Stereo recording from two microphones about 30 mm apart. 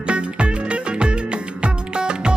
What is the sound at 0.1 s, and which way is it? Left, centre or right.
Music, right.